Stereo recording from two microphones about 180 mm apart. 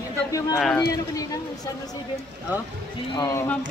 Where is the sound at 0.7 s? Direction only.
20° left (ahead or behind).